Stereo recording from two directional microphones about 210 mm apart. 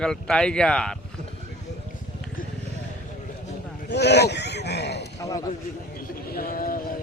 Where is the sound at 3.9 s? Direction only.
55° left (ahead or behind).